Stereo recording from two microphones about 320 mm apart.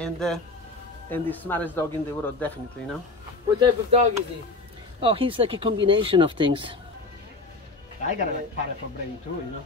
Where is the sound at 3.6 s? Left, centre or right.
Centre.